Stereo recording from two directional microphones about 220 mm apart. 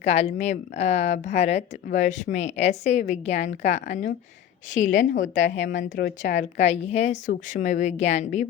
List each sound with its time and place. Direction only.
0.0 s speech: 30° left (ahead or behind)
5.4 s speech: 55° left (ahead or behind)
5.7 s a woman's voice: 45° left (ahead or behind)
6.3 s speech: 30° left (ahead or behind)